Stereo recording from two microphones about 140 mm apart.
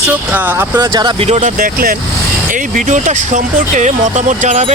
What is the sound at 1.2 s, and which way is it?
Speech, 55° right (ahead or behind).